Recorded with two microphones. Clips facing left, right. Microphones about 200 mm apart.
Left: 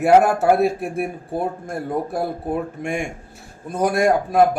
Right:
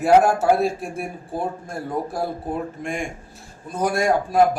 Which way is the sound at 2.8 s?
60° left (ahead or behind).